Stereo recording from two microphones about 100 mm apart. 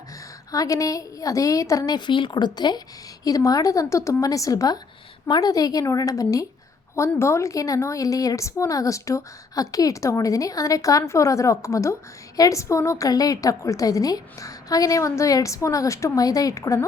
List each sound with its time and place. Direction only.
0.5 s a woman's voice: 35° left (ahead or behind)
2.0 s a woman's voice: 50° left (ahead or behind); by 16.8 s 35° left (ahead or behind)